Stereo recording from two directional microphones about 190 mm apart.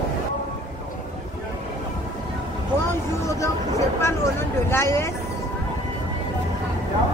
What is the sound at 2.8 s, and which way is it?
Vehicle, 15° left (ahead or behind).